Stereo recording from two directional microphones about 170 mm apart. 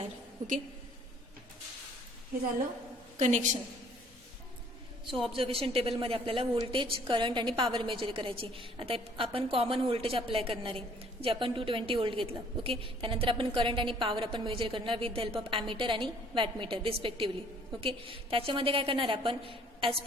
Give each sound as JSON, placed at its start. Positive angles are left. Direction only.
{"t": 3.2, "sound": "a woman's voice", "side_deg": -45}
{"t": 5.2, "sound": "a woman's voice", "side_deg": -30}